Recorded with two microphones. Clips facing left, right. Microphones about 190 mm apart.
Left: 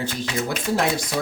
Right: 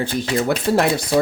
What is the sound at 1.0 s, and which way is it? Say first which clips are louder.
Speech: right 8 dB; 30° right (ahead or behind).